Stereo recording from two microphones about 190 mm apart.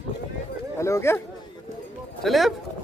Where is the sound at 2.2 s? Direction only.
Centre (ahead or behind).